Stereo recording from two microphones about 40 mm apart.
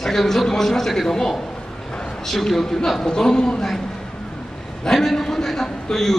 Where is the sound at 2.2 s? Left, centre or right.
Centre.